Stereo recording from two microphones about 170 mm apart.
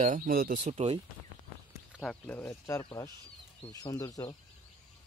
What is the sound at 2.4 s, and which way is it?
Speech, 20° left (ahead or behind).